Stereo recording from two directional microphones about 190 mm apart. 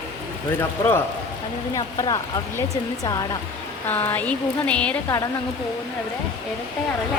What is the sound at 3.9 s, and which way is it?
Speech, 10° left (ahead or behind).